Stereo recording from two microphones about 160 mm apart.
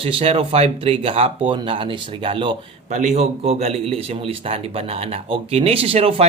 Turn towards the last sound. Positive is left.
turn(degrees=-40)  # may be behind; listen again after turning